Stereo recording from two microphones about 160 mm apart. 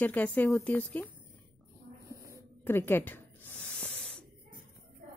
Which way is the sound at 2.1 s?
20° right (ahead or behind).